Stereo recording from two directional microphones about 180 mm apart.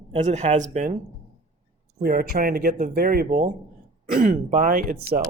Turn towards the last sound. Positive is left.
turn(degrees=-50)  # may be behind; listen again after turning